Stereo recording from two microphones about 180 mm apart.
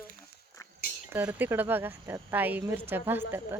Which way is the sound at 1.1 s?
10° right (ahead or behind).